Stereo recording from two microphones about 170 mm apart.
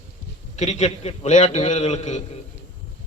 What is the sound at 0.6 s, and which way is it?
A man's voice, 40° left (ahead or behind).